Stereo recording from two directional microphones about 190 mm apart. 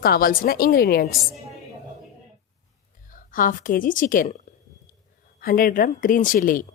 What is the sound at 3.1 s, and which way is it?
A woman's voice, 45° left (ahead or behind).